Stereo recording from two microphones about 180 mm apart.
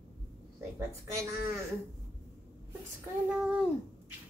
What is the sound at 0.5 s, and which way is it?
Speech, 15° right (ahead or behind).